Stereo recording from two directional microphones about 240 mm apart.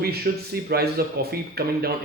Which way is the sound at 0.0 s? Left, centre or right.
Right.